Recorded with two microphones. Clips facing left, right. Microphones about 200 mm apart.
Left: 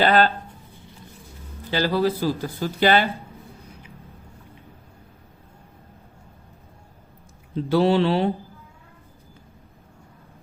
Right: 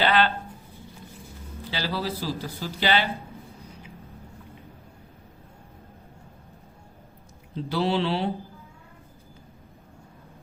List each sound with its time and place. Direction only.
0.0 s a sound: 45° left (ahead or behind)
1.7 s speech: 50° left (ahead or behind)
7.7 s speech: 50° left (ahead or behind)